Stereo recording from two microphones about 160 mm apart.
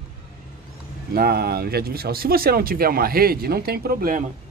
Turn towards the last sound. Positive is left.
turn(degrees=-60)  # may be behind; listen again after turning